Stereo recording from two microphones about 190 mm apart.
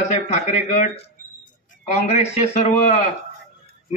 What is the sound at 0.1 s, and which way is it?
A man's voice, 35° left (ahead or behind).